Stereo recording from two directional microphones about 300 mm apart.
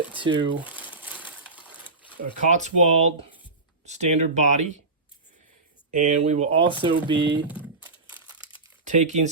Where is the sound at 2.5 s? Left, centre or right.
Right.